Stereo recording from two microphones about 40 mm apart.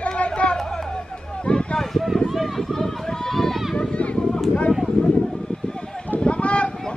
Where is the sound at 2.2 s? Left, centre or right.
Centre.